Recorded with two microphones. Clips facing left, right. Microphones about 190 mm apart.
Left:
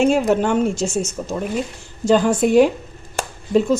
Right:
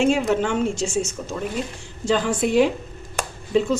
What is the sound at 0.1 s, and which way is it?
A woman's voice, 40° left (ahead or behind).